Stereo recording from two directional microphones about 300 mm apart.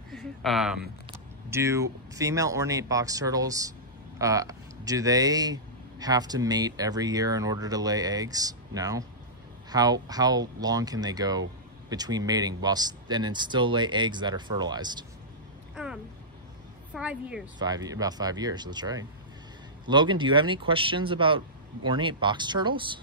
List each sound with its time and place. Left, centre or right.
0.1 s speech: centre
15.7 s a sound: centre
16.9 s a woman's voice: centre